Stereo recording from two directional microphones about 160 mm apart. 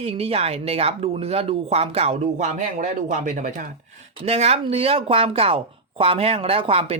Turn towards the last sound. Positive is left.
turn(degrees=-35)  # may be behind; listen again after turning